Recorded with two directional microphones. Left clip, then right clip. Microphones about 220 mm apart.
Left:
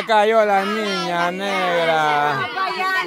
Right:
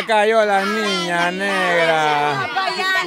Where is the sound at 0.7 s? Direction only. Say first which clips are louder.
Right 2 dB; 50° right (ahead or behind).